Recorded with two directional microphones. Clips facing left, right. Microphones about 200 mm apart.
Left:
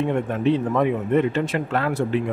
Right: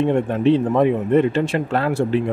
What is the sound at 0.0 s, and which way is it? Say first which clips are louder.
A man's voice: right 4 dB; 30° right (ahead or behind).